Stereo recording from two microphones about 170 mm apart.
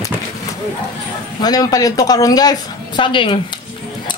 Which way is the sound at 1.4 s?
25° left (ahead or behind).